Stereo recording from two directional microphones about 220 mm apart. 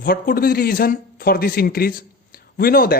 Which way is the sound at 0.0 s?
40° left (ahead or behind).